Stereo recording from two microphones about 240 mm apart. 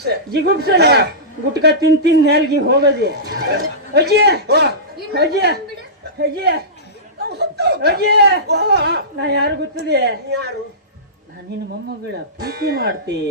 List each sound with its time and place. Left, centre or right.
0.0 s speech: right
12.4 s speech: right